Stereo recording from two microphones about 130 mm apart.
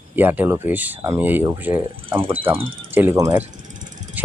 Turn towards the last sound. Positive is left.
turn(degrees=-65)  # may be behind; listen again after turning